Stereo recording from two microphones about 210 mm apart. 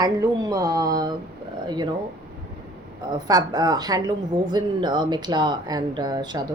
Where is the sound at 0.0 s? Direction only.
15° right (ahead or behind).